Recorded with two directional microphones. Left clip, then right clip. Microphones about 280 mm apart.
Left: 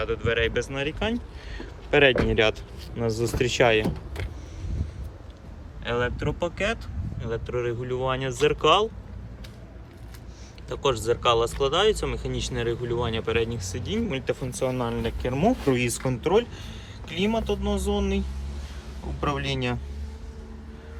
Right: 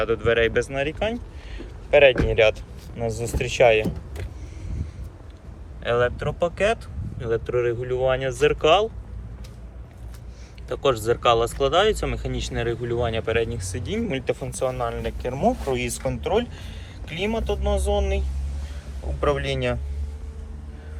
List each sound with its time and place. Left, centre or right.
0.0 s speech: centre
5.8 s speech: centre
10.7 s speech: centre
19.2 s speech: centre